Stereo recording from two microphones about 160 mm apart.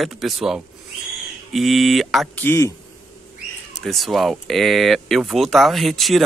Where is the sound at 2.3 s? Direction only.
15° left (ahead or behind).